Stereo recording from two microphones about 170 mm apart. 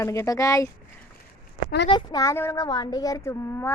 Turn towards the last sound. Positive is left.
turn(degrees=15)  # may be behind; listen again after turning